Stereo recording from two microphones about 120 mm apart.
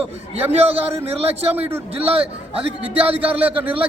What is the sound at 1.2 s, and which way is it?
Speech, 55° right (ahead or behind).